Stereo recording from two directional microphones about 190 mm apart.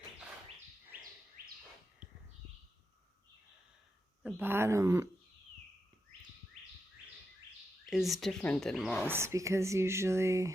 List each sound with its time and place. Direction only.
1.4 s bird: 50° right (ahead or behind)
4.2 s speech: 10° right (ahead or behind)
7.9 s speech: centre (ahead or behind)
9.0 s speech: 15° right (ahead or behind)